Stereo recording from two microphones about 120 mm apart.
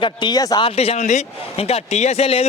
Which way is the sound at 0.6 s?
60° left (ahead or behind).